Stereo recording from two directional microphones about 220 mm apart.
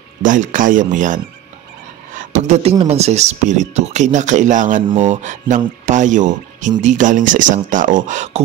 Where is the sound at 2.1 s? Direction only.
35° right (ahead or behind).